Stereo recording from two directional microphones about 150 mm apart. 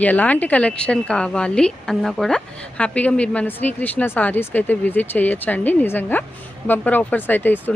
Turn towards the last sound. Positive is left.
turn(degrees=10)  # may be behind; listen again after turning